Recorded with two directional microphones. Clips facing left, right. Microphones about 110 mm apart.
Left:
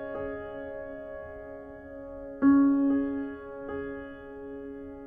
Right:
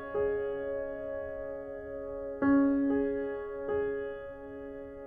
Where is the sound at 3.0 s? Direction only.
40° left (ahead or behind).